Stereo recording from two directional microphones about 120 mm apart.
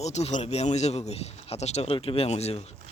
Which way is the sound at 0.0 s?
70° left (ahead or behind).